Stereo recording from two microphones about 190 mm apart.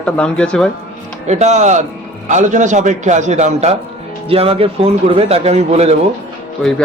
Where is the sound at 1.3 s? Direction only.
35° right (ahead or behind).